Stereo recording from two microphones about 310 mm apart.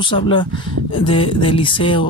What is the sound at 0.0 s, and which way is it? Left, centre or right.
Speech, centre.